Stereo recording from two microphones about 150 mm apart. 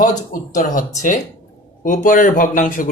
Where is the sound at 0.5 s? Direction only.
60° left (ahead or behind).